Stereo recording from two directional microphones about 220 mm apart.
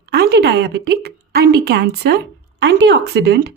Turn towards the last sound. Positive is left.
turn(degrees=-50)  # may be behind; listen again after turning